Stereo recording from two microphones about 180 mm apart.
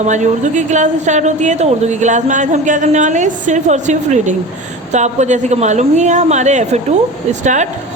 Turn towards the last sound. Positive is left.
turn(degrees=-40)  # may be behind; listen again after turning